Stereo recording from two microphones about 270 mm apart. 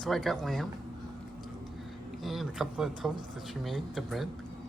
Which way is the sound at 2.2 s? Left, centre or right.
Centre.